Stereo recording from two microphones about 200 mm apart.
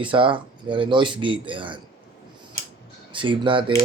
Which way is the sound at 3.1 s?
25° right (ahead or behind).